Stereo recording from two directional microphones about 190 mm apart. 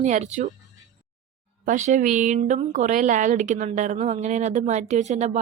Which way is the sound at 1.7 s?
40° right (ahead or behind).